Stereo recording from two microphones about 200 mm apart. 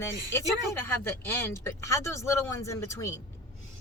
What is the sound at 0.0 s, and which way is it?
Speech, 15° left (ahead or behind).